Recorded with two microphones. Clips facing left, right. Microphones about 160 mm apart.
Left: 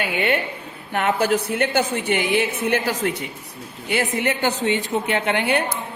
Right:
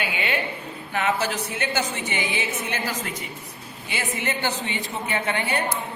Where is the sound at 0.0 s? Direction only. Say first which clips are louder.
Left 5 dB; 55° left (ahead or behind).